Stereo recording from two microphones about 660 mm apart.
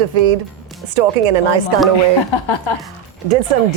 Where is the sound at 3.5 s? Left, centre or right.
Right.